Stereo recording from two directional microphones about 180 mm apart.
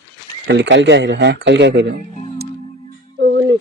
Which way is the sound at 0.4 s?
80° right.